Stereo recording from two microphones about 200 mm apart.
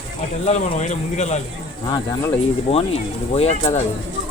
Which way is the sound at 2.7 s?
30° left (ahead or behind).